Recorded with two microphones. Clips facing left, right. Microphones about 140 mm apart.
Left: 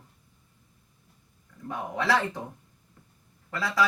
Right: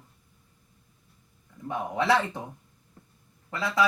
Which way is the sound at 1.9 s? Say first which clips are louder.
Right 2 dB; 25° right (ahead or behind).